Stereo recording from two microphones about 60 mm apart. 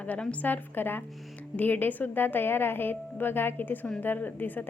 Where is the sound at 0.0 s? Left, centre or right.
Left.